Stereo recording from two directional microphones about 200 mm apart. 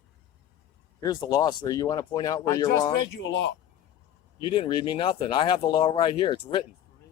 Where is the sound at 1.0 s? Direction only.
20° left (ahead or behind).